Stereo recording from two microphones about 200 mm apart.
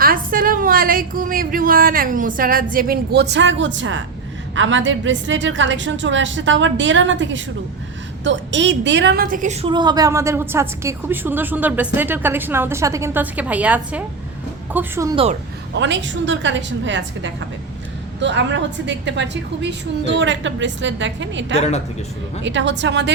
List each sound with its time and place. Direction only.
0.0 s a woman's voice: 45° right (ahead or behind); by 15.1 s 10° right (ahead or behind)
15.1 s speech: 30° right (ahead or behind)
15.7 s a woman's voice: 65° right (ahead or behind)